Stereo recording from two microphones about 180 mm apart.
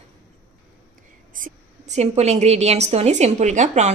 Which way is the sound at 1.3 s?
45° right (ahead or behind).